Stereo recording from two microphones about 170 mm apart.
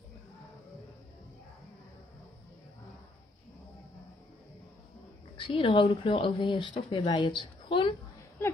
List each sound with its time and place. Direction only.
5.5 s speech: 30° left (ahead or behind)